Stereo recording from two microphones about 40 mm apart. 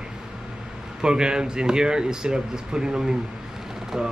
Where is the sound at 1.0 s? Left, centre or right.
Centre.